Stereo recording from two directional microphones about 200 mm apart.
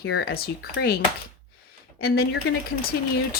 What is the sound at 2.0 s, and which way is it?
Speech, 50° left (ahead or behind).